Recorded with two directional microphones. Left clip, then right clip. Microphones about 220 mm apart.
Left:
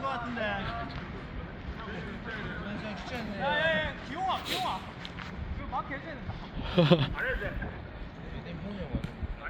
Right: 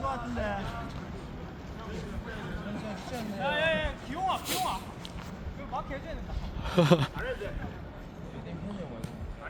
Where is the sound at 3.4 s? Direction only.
50° right (ahead or behind).